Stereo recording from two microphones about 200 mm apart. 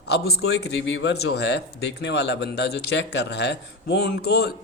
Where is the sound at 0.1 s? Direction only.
55° left (ahead or behind).